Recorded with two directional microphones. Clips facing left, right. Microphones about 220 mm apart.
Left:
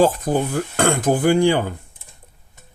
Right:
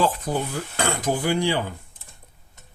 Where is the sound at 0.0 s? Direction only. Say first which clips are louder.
Left 6 dB; 45° left (ahead or behind).